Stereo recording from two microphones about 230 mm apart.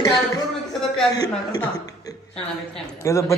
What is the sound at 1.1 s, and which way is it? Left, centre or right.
Speech, centre.